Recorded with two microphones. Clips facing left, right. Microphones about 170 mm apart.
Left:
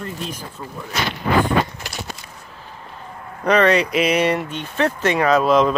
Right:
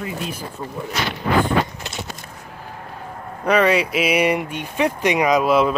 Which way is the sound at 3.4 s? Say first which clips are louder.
Left 1 dB; 5° right (ahead or behind).